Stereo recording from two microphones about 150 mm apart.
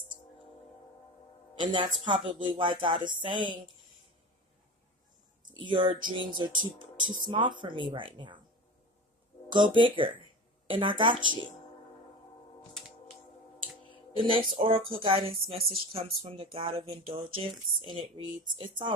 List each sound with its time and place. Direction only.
1.5 s speech: 35° right (ahead or behind)
5.5 s speech: 35° right (ahead or behind)
9.5 s speech: 30° right (ahead or behind)
14.2 s speech: 35° right (ahead or behind)